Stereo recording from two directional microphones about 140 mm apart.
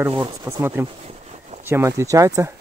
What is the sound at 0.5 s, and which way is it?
Speech, 20° right (ahead or behind).